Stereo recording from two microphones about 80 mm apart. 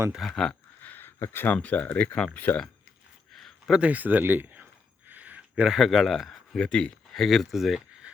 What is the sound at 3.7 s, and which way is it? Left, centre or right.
Speech, centre.